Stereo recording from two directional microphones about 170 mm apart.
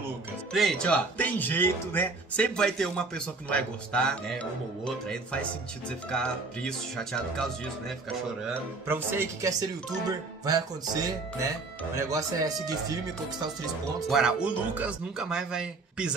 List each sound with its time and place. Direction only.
0.5 s speech: centre (ahead or behind)
8.8 s speech: 15° right (ahead or behind)
14.0 s speech: centre (ahead or behind)